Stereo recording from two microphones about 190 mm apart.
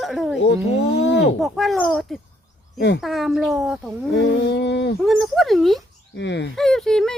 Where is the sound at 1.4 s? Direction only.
Centre (ahead or behind).